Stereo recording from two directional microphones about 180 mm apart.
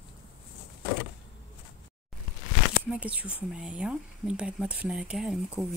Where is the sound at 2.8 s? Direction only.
5° right (ahead or behind).